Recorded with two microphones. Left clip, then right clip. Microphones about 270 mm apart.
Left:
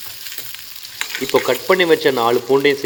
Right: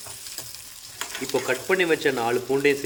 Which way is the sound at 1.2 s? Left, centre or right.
Centre.